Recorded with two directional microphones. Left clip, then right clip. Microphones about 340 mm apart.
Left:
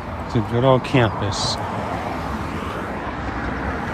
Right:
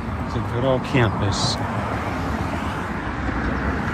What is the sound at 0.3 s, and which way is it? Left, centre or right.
Speech, left.